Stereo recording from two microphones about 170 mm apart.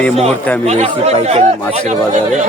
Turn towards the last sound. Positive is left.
turn(degrees=-40)  # may be behind; listen again after turning